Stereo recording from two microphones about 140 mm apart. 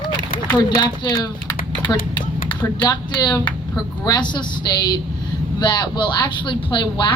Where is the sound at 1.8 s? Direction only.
30° left (ahead or behind).